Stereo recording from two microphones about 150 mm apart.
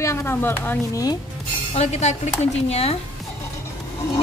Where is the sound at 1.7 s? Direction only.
45° left (ahead or behind).